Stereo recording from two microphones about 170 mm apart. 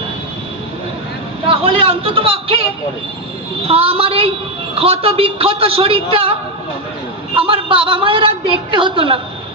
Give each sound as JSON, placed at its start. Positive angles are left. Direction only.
{"t": 1.5, "sound": "a woman's voice", "side_deg": -35}
{"t": 3.7, "sound": "a woman's voice", "side_deg": -35}
{"t": 7.3, "sound": "a woman's voice", "side_deg": -30}